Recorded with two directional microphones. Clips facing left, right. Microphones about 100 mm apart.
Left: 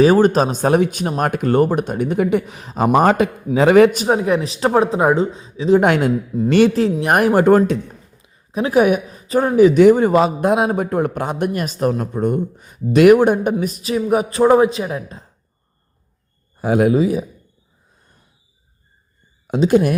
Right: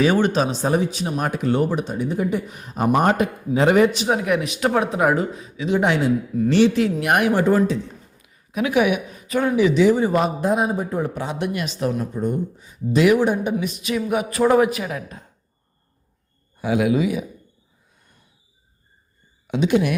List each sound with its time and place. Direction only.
0.0 s speech: 40° left (ahead or behind); by 3.2 s 90° left
3.5 s speech: 75° left (ahead or behind)
3.9 s speech: 40° left (ahead or behind)
5.8 s speech: 55° left (ahead or behind)
6.3 s a man's voice: 30° left (ahead or behind); by 10.1 s 55° left (ahead or behind)
10.1 s speech: 90° left; by 15.3 s 30° left (ahead or behind)
16.6 s speech: 45° left (ahead or behind)
17.9 s a sound: 35° left (ahead or behind)
19.5 s speech: 40° left (ahead or behind)